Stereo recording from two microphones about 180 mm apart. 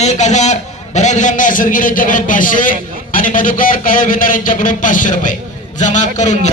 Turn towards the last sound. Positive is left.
turn(degrees=40)  # may be behind; listen again after turning